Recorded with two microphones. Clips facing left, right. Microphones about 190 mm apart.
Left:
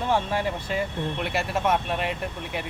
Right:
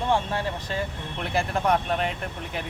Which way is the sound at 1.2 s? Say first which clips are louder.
Right 2 dB; 5° left (ahead or behind).